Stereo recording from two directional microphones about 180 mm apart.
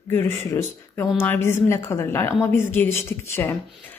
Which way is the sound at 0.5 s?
15° left (ahead or behind).